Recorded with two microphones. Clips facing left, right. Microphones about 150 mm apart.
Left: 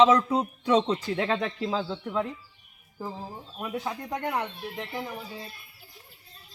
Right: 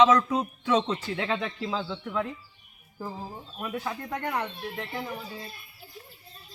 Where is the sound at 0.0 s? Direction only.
30° left (ahead or behind).